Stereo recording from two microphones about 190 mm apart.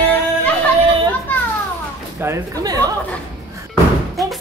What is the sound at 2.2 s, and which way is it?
Speech, 15° right (ahead or behind).